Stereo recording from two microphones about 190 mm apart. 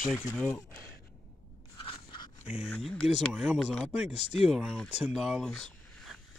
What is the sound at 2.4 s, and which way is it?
Speech, 5° right (ahead or behind).